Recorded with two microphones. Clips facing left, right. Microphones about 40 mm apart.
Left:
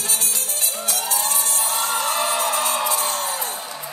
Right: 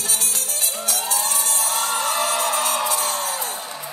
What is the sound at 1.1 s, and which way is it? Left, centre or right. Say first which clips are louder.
Music: even; left.